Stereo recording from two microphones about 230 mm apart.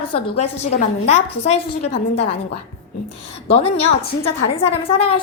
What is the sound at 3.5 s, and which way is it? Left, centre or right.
A woman's voice, left.